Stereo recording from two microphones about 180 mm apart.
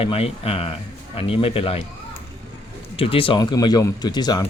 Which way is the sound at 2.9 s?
30° left (ahead or behind).